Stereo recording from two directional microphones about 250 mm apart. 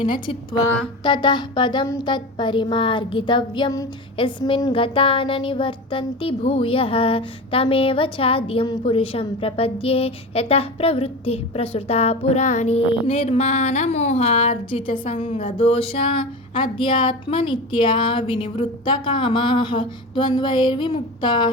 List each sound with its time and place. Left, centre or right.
0.0 s a woman's voice: centre